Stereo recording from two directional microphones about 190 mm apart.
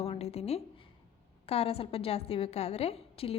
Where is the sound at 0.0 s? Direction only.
35° left (ahead or behind).